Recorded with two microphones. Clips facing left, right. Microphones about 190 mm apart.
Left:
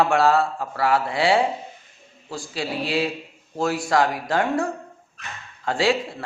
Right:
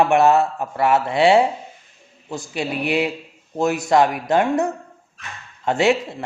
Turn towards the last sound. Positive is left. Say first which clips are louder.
# right 4 dB
turn(degrees=-20)  # may be behind; listen again after turning